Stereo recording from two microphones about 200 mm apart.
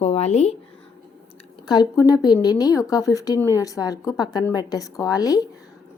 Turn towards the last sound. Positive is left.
turn(degrees=20)  # may be behind; listen again after turning